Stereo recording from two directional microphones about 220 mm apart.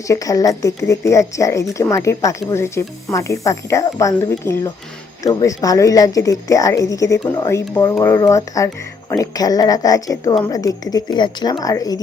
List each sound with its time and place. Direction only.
0.1 s speech: 15° left (ahead or behind)